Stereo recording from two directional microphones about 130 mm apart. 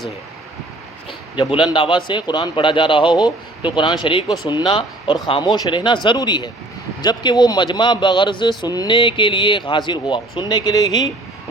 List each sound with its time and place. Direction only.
1.4 s speech: 40° left (ahead or behind)